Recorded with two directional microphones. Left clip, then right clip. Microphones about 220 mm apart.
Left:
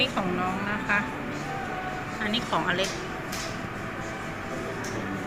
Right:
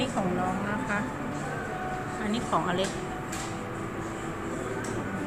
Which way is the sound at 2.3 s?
10° right (ahead or behind).